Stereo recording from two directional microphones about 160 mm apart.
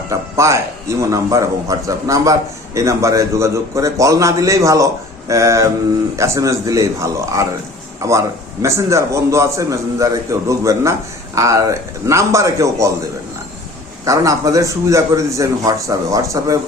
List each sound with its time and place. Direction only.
0.1 s a man's voice: 20° right (ahead or behind)
14.0 s a man's voice: 20° right (ahead or behind)